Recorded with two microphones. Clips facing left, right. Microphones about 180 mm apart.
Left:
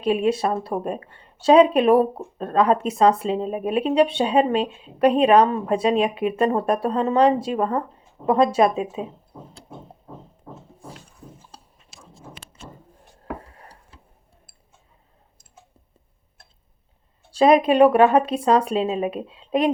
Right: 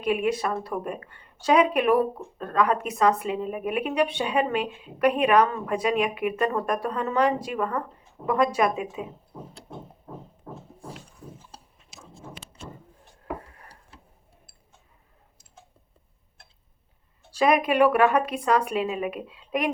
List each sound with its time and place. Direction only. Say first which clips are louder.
0.0 s speech: left 4 dB; 30° left (ahead or behind)
12.4 s vehicle: even; 20° right (ahead or behind)
17.3 s speech: left 6 dB; 30° left (ahead or behind)